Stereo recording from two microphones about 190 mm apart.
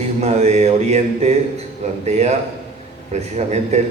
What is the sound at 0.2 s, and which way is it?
Speech, 35° right (ahead or behind).